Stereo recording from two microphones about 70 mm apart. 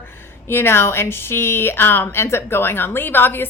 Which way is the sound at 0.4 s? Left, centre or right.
Left.